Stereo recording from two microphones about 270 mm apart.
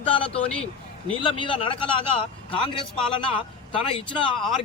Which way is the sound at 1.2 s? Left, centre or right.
Centre.